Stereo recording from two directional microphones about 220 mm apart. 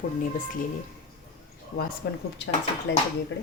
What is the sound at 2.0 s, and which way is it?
Speech, 50° left (ahead or behind).